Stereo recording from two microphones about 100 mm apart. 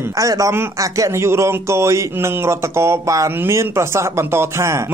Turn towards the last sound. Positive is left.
turn(degrees=-30)  # may be behind; listen again after turning